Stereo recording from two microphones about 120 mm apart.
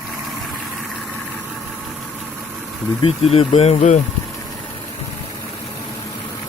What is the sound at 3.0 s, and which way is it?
Speech, 55° left (ahead or behind).